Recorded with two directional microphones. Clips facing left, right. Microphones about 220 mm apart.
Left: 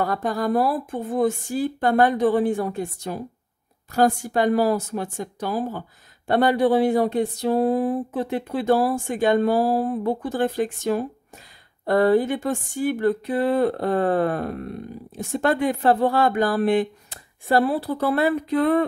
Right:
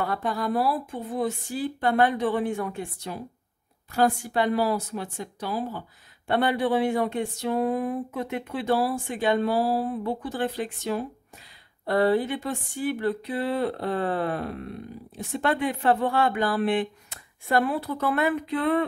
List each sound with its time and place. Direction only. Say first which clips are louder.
0.0 s speech: left 4 dB; 40° left (ahead or behind)